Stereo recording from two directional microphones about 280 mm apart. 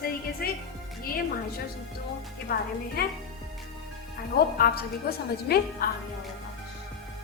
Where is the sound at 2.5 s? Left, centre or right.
Left.